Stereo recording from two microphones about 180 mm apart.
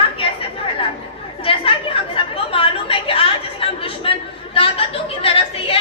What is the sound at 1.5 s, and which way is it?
Chatter, 30° left (ahead or behind).